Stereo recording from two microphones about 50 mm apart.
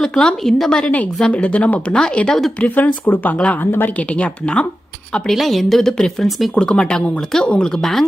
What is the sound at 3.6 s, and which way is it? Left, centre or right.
Speech, left.